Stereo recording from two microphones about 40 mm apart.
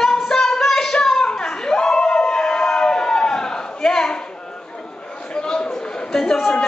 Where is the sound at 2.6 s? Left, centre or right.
Centre.